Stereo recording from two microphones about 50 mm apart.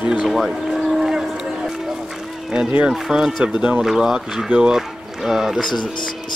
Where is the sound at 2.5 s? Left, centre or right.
Centre.